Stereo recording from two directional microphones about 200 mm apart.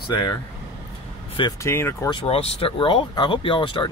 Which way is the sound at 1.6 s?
10° left (ahead or behind).